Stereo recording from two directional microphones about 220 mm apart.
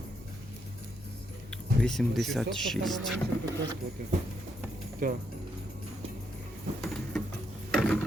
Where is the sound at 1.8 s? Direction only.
Centre (ahead or behind).